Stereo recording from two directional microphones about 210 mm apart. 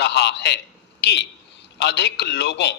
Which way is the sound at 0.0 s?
55° left (ahead or behind).